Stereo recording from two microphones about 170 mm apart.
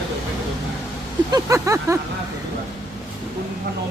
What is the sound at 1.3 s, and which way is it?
Vehicle, 20° right (ahead or behind).